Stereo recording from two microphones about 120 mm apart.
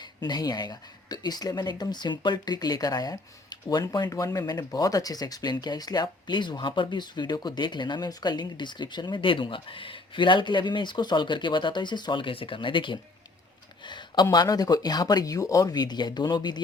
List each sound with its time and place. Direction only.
0.0 s speech: 35° left (ahead or behind)
13.8 s a sound: 40° left (ahead or behind)
14.3 s speech: 30° left (ahead or behind)